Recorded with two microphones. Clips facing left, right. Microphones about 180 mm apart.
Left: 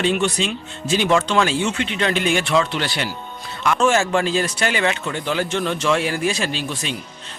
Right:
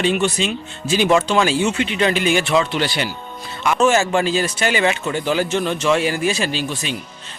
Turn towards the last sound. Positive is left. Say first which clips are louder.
# right 2 dB
turn(degrees=0)  # may be behind; listen again after turning